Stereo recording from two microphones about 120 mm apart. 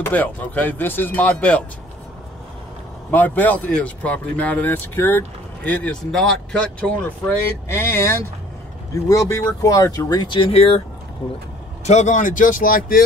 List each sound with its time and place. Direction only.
0.0 s speech: 15° left (ahead or behind)
3.1 s speech: 15° left (ahead or behind); by 10.8 s 55° left (ahead or behind)
11.8 s speech: 70° left (ahead or behind); by 12.4 s 90° left